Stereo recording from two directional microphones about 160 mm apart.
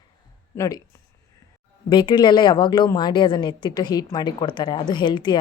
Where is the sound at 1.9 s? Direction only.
30° left (ahead or behind).